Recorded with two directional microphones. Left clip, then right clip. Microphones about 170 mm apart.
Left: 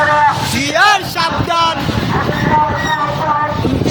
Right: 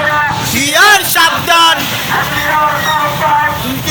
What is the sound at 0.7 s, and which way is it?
Music, centre (ahead or behind).